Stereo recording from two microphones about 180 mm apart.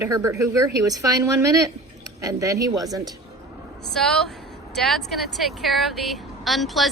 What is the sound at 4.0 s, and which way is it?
Speech, centre (ahead or behind).